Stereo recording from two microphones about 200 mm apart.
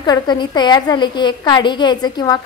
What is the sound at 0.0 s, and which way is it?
A woman's voice, 20° left (ahead or behind).